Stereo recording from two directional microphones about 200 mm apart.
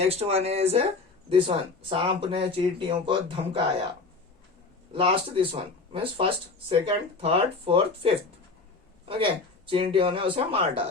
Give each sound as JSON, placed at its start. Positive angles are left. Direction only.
{"t": 0.0, "sound": "speech", "side_deg": -30}
{"t": 4.9, "sound": "speech", "side_deg": -25}